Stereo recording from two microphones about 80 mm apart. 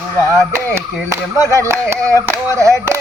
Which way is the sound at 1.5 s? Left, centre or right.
Right.